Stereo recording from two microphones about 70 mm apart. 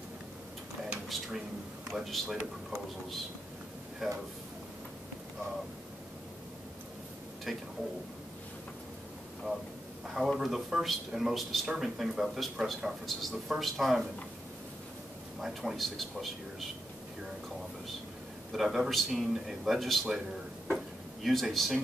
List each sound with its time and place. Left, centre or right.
1.0 s speech: centre
4.0 s speech: centre
7.5 s speech: centre
9.5 s speech: right
10.0 s speech: centre
15.4 s speech: centre
18.5 s speech: centre
20.7 s drawer open or close: centre